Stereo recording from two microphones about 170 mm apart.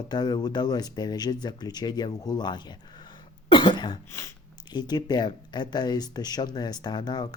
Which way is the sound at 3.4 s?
30° left (ahead or behind).